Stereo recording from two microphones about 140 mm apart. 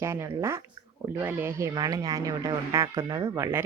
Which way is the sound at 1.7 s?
30° right (ahead or behind).